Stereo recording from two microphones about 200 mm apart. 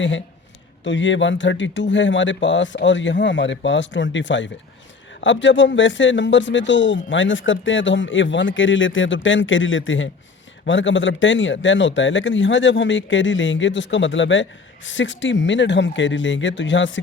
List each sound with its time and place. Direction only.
0.9 s speech: 65° left (ahead or behind)